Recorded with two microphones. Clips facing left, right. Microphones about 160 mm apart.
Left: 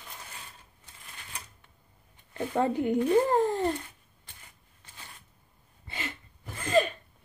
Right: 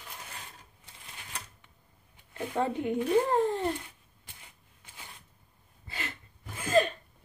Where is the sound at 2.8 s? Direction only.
35° left (ahead or behind).